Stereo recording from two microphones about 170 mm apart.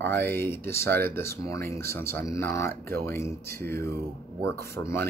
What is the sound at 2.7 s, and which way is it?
Speech, 60° right (ahead or behind).